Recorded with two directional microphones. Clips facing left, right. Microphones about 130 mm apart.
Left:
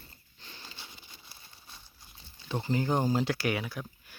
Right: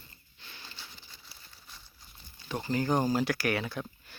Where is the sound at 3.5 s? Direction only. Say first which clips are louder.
Right 2 dB; 5° left (ahead or behind).